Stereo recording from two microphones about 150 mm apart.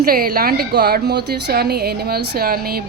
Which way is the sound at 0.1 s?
80° right.